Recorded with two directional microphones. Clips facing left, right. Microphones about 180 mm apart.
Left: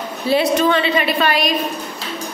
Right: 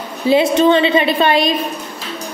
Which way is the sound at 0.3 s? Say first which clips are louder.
Right 4 dB; 25° right (ahead or behind).